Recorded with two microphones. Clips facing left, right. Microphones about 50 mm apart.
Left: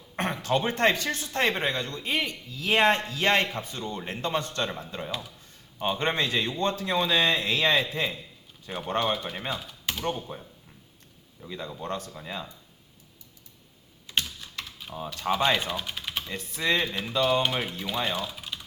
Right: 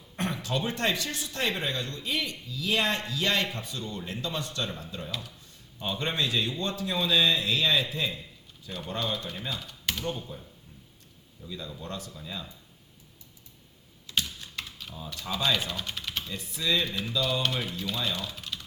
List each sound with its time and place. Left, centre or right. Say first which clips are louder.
0.2 s a man's voice: left 4 dB; left
9.6 s typewriter: even; centre
10.0 s a man's voice: left 3 dB; left
11.4 s a man's voice: left 4 dB; left
14.9 s a man's voice: left 8 dB; left
15.4 s speech: left 2 dB; left
15.7 s typing: left 2 dB; centre
16.3 s a man's voice: left 3 dB; left
17.7 s speech: even; left
17.9 s a man's voice: left 4 dB; left
18.2 s typing: left 2 dB; centre